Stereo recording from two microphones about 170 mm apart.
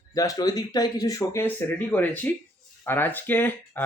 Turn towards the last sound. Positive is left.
turn(degrees=10)  # may be behind; listen again after turning